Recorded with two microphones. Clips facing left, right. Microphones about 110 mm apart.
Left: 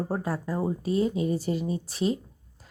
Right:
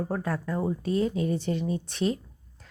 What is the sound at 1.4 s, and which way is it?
Speech, 5° left (ahead or behind).